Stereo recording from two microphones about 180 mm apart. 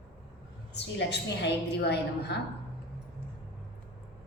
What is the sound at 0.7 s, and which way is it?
A woman's voice, 70° left (ahead or behind).